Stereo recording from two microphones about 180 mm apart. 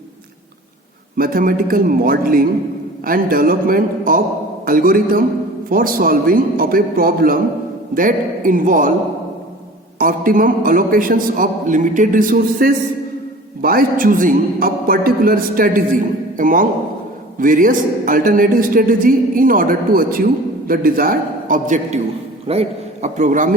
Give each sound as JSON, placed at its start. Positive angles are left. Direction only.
{"t": 1.1, "sound": "a man's voice", "side_deg": -50}
{"t": 10.0, "sound": "a man's voice", "side_deg": -50}